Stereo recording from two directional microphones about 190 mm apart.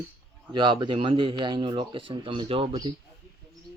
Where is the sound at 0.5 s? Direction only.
25° right (ahead or behind).